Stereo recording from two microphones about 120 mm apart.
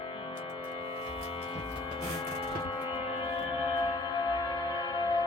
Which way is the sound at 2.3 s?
50° left (ahead or behind).